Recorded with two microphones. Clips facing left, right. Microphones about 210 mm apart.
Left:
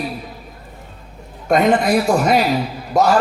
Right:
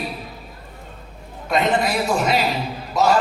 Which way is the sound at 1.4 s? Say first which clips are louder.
Left 5 dB; 50° left (ahead or behind).